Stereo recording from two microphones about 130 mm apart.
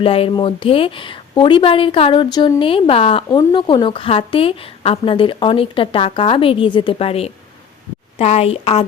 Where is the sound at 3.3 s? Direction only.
35° left (ahead or behind).